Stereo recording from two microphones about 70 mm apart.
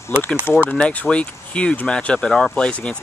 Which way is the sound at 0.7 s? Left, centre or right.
Centre.